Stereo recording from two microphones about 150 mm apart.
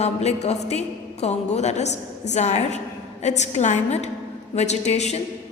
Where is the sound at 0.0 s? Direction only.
45° left (ahead or behind).